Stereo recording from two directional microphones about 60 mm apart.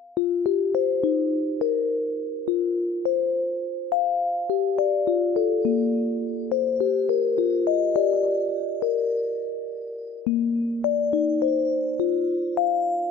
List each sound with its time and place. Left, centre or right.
5.7 s music: left
7.0 s music: right
7.7 s music: left
12.5 s music: centre